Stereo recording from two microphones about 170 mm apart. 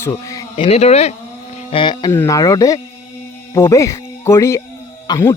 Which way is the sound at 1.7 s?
25° left (ahead or behind).